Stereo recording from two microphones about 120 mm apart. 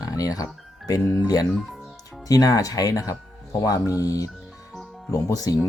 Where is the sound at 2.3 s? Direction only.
30° left (ahead or behind).